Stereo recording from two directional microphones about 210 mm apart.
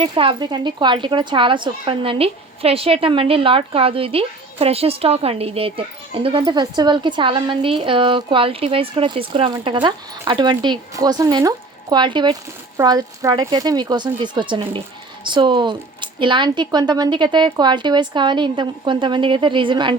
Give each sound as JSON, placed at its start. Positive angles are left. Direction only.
{"t": 0.0, "sound": "speech", "side_deg": -25}